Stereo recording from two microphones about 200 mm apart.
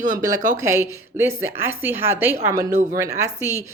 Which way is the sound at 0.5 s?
15° right (ahead or behind).